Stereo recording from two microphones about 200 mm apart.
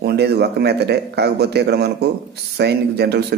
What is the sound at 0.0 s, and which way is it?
Speech, 55° right (ahead or behind).